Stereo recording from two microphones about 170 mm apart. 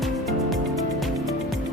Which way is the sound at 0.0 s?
Centre (ahead or behind).